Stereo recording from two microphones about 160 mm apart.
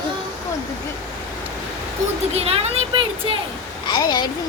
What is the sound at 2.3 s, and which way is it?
Speech, 40° right (ahead or behind).